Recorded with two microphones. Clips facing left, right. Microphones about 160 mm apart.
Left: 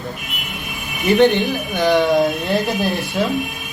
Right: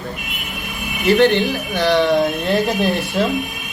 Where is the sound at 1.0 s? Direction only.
10° left (ahead or behind).